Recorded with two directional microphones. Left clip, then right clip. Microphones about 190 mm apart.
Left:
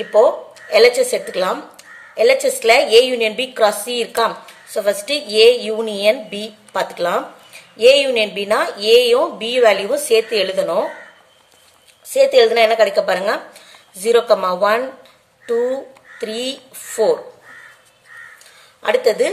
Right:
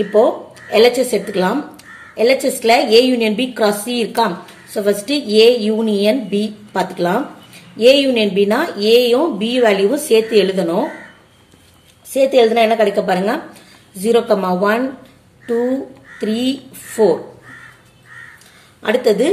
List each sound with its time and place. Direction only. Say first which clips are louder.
0.1 s a woman's voice: left 2 dB; 20° left (ahead or behind)
12.1 s a woman's voice: even; 25° left (ahead or behind)
16.2 s a woman's voice: right 3 dB; 25° left (ahead or behind)
18.8 s a woman's voice: right 1 dB; 20° left (ahead or behind)